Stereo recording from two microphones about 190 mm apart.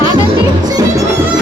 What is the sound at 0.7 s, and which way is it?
Music, 20° right (ahead or behind).